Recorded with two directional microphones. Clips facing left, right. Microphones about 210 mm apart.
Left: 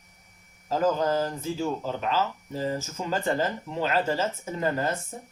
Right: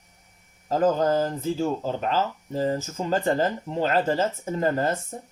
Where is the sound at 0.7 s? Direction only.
50° right (ahead or behind).